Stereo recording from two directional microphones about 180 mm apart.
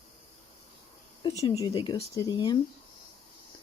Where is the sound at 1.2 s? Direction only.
30° left (ahead or behind).